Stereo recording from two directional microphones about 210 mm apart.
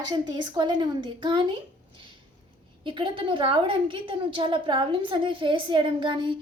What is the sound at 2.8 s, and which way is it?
A woman's voice, 25° right (ahead or behind).